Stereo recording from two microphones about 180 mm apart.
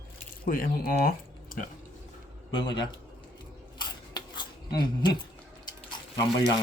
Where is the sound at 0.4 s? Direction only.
50° left (ahead or behind).